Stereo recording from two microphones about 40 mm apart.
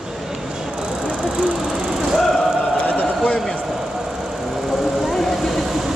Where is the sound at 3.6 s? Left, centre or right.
Centre.